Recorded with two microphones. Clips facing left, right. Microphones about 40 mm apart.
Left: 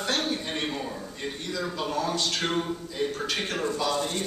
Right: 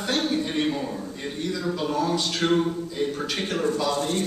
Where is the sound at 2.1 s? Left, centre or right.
Centre.